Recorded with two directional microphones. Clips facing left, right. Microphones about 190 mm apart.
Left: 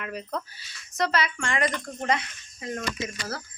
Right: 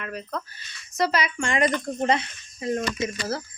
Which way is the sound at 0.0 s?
15° left (ahead or behind).